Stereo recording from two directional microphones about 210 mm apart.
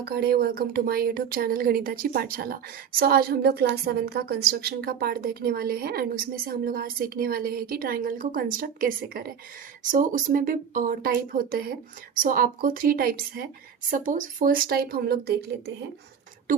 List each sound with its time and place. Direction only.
0.0 s a woman's voice: 45° right (ahead or behind)